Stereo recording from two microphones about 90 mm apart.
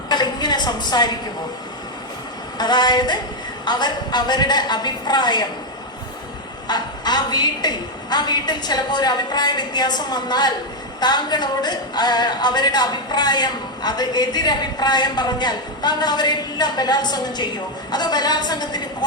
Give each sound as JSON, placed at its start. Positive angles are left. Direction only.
{"t": 0.1, "sound": "a sound", "side_deg": 50}
{"t": 2.6, "sound": "a woman's voice", "side_deg": 50}
{"t": 6.7, "sound": "a woman's voice", "side_deg": 50}